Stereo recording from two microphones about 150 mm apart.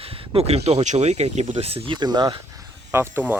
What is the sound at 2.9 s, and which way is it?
Speech, 15° right (ahead or behind).